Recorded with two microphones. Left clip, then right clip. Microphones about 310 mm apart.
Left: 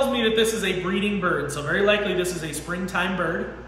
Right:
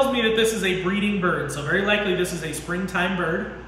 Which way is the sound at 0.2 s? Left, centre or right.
Centre.